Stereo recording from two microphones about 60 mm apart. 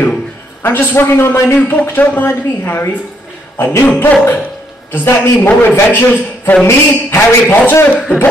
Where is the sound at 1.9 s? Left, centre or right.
Left.